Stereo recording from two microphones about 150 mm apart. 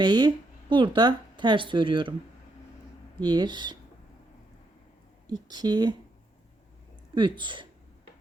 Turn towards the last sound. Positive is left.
turn(degrees=-30)  # may be behind; listen again after turning